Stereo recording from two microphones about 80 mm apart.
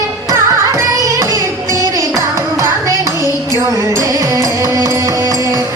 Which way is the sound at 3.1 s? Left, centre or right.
Left.